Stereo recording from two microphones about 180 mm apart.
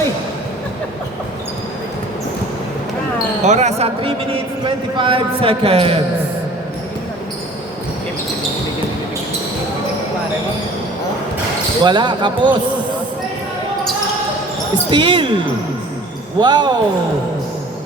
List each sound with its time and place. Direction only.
3.4 s a man's voice: 40° right (ahead or behind)
11.8 s speech: 25° right (ahead or behind)
14.8 s speech: 30° right (ahead or behind)
16.4 s speech: 25° right (ahead or behind)